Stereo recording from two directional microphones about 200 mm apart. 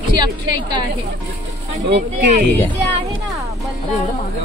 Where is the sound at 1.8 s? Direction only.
55° right (ahead or behind).